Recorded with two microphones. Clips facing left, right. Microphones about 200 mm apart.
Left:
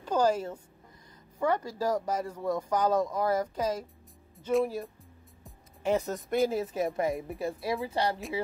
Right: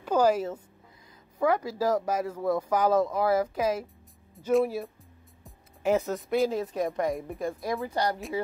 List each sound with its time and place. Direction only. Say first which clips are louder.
0.0 s a sound: right 3 dB; 10° right (ahead or behind)
1.4 s speech: right 3 dB; 10° right (ahead or behind)
7.9 s speech: right 2 dB; 30° left (ahead or behind)